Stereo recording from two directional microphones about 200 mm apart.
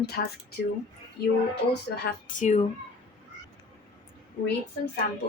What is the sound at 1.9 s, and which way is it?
Speech, 40° left (ahead or behind).